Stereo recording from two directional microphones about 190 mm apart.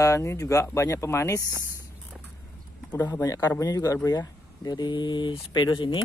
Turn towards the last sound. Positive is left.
turn(degrees=25)  # may be behind; listen again after turning